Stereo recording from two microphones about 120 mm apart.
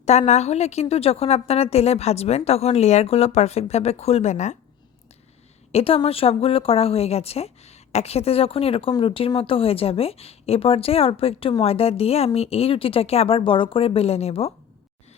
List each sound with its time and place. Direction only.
0.0 s a woman's voice: 65° left (ahead or behind)
5.7 s a woman's voice: 50° left (ahead or behind)